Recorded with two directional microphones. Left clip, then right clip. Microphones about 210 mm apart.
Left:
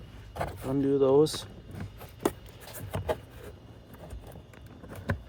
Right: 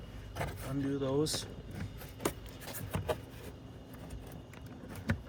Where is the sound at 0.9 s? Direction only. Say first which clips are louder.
Left 11 dB; 25° left (ahead or behind).